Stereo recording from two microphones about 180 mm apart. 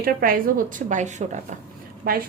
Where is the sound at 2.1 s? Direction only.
55° right (ahead or behind).